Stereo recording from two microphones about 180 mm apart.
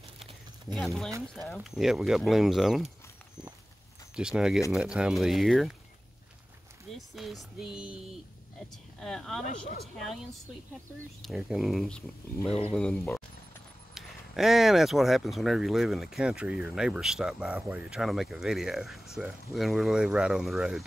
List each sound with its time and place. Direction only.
0.7 s speech: centre (ahead or behind)
4.1 s speech: 5° right (ahead or behind)
7.0 s speech: centre (ahead or behind)
11.2 s speech: centre (ahead or behind)
12.4 s speech: 35° left (ahead or behind)
12.7 s speech: 5° left (ahead or behind)